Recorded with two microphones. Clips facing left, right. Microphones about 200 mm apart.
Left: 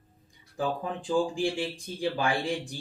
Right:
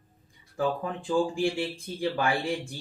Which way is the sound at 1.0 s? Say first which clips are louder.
Right 1 dB; 15° left (ahead or behind).